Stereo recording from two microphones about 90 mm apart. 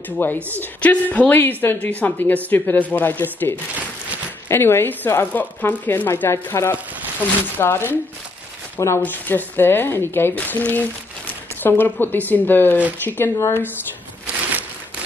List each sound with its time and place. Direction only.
0.2 s a woman's voice: 25° left (ahead or behind)